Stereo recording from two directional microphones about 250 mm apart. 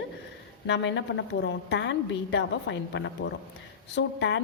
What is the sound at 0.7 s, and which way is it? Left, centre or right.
A woman's voice, left.